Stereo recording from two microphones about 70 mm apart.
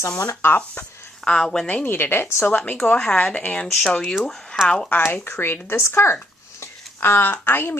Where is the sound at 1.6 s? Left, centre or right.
Left.